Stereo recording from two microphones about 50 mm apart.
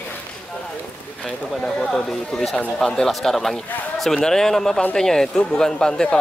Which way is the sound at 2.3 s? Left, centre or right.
Centre.